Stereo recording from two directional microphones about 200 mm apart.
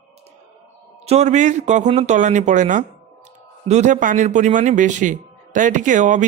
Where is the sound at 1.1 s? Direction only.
35° right (ahead or behind).